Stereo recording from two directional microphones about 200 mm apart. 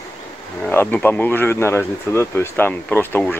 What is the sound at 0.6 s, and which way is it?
Speech, 10° left (ahead or behind).